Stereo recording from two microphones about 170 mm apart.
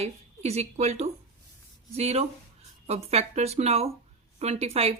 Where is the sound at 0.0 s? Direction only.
40° right (ahead or behind).